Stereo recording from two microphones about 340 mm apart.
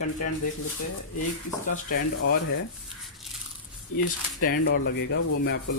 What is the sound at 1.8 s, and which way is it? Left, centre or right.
Speech, left.